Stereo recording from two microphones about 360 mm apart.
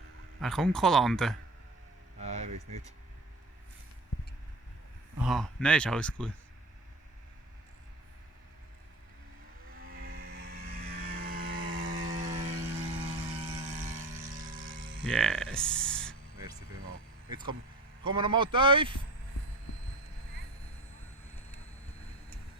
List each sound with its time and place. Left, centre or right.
0.4 s speech: centre
2.2 s a sound: centre
5.2 s speech: centre
9.7 s vehicle: right
14.5 s a sound: right
15.0 s speech: centre
18.1 s speech: centre